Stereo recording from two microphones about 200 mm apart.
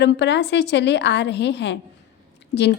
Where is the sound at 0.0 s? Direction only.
60° left (ahead or behind).